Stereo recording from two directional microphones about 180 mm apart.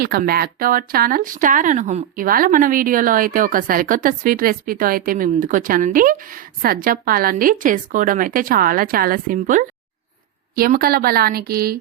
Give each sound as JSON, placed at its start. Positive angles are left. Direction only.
{"t": 0.0, "sound": "a woman's voice", "side_deg": -55}